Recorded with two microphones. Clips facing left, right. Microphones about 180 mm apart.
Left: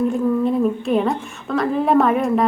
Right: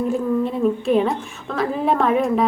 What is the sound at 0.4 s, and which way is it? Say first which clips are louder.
A woman's voice: left 1 dB; centre (ahead or behind).